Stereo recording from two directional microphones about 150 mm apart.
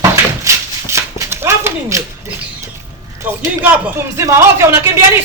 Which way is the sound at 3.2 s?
10° right (ahead or behind).